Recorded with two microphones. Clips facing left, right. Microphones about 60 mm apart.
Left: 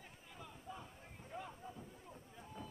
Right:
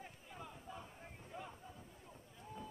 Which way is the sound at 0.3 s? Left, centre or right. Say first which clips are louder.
Even; centre.